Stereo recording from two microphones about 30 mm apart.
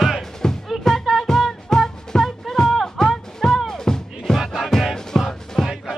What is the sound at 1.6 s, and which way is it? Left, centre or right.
Music, centre.